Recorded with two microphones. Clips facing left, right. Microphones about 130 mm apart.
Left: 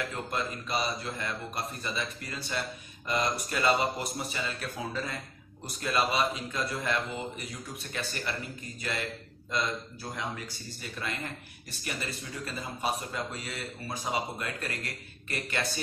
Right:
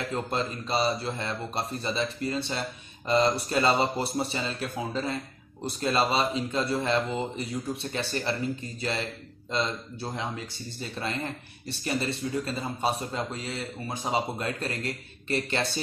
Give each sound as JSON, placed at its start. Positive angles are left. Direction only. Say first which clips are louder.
{"t": 0.1, "sound": "a man's voice", "louder": "right 4 dB", "side_deg": -30}
{"t": 10.1, "sound": "a man's voice", "louder": "even", "side_deg": -25}